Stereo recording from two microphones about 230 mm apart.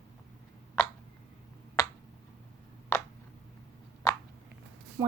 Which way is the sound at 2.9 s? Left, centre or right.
Centre.